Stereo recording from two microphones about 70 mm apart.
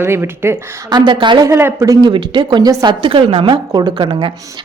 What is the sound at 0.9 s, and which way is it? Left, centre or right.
Speech, right.